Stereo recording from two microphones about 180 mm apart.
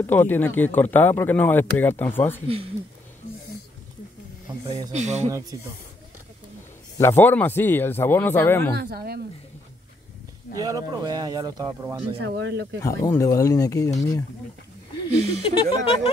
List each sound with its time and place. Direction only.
0.0 s speech: 10° left (ahead or behind)
2.4 s speech: 30° right (ahead or behind)
4.9 s speech: 40° right (ahead or behind)
7.0 s speech: 15° left (ahead or behind)
8.7 s speech: 60° right (ahead or behind)
10.6 s speech: 20° right (ahead or behind)
12.2 s speech: 70° right (ahead or behind)
12.8 s speech: 15° left (ahead or behind)
15.1 s speech: 35° right (ahead or behind)
15.4 s speech: 25° left (ahead or behind)